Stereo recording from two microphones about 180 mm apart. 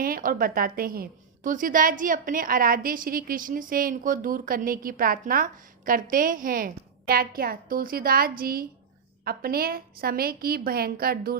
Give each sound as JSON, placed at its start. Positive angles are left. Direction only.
{"t": 0.0, "sound": "a woman's voice", "side_deg": -50}